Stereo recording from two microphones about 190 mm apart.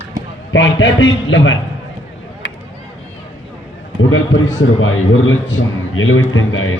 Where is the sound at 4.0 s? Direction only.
90° left.